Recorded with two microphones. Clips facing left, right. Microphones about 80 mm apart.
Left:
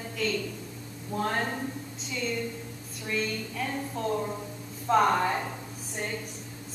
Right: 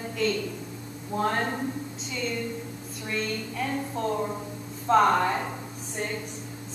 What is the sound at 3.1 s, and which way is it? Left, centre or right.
A woman's voice, centre.